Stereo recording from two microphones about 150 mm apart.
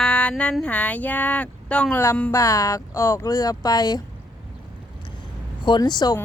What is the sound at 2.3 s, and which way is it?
Speech, 20° left (ahead or behind).